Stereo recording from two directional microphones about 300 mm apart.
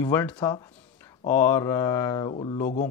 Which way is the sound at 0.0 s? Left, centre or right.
Centre.